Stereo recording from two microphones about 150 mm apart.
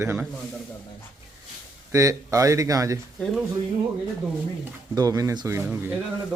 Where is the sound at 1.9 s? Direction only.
20° right (ahead or behind).